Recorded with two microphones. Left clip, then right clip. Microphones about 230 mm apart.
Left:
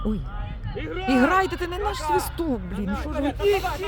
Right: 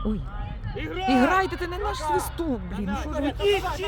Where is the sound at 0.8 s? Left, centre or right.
Right.